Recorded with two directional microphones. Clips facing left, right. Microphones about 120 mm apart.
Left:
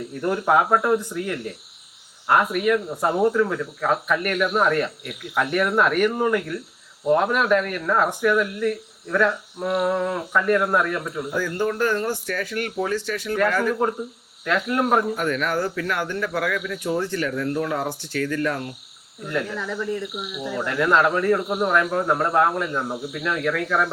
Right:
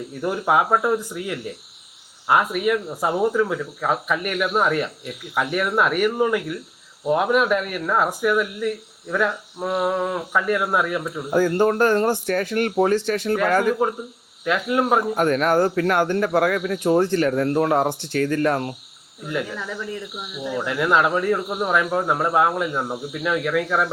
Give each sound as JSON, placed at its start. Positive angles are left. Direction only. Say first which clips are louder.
{"t": 0.2, "sound": "speech", "louder": "even", "side_deg": -5}
{"t": 11.3, "sound": "speech", "louder": "right 7 dB", "side_deg": -45}
{"t": 13.1, "sound": "speech", "louder": "right 5 dB", "side_deg": -55}
{"t": 13.5, "sound": "speech", "louder": "right 4 dB", "side_deg": -40}
{"t": 14.4, "sound": "speech", "louder": "right 1 dB", "side_deg": -10}
{"t": 15.1, "sound": "speech", "louder": "right 5 dB", "side_deg": -45}
{"t": 17.8, "sound": "speech", "louder": "right 4 dB", "side_deg": -25}
{"t": 19.3, "sound": "speech", "louder": "left 1 dB", "side_deg": -5}